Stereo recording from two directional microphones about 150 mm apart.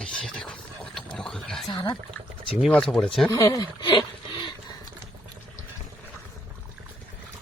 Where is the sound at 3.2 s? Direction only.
20° left (ahead or behind).